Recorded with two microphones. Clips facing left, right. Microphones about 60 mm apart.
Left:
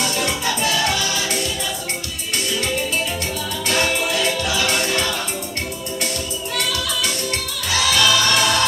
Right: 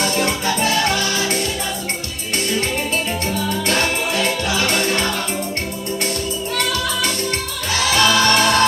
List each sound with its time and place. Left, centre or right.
0.0 s music: right
3.7 s music: right
6.6 s music: right